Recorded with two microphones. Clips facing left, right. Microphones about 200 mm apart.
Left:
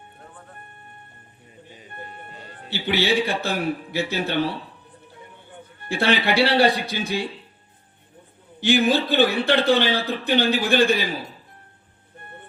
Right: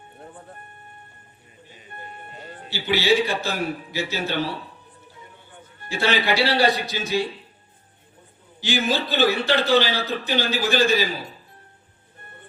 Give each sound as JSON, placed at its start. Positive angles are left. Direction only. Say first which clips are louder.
{"t": 2.6, "sound": "a man's voice", "louder": "right 2 dB", "side_deg": 55}
{"t": 5.9, "sound": "a man's voice", "louder": "left 1 dB", "side_deg": 60}
{"t": 8.6, "sound": "a man's voice", "louder": "left 5 dB", "side_deg": 55}